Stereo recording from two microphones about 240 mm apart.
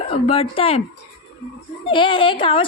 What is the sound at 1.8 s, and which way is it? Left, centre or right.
Speech, left.